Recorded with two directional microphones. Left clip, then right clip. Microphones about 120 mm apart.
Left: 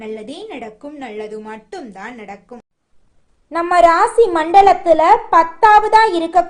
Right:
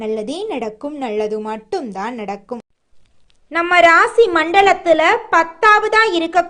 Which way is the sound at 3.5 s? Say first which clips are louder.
Even; 15° right (ahead or behind).